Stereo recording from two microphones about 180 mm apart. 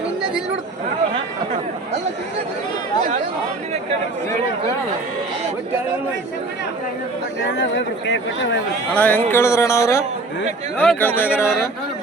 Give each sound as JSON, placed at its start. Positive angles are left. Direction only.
{"t": 7.6, "sound": "speech", "side_deg": 80}
{"t": 8.9, "sound": "speech", "side_deg": 10}